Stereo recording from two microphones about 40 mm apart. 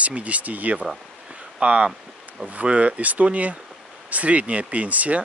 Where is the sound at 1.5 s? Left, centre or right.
Right.